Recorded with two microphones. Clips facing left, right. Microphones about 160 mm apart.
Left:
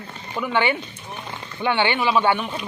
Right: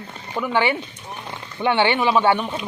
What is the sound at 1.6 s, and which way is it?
Speech, 25° right (ahead or behind).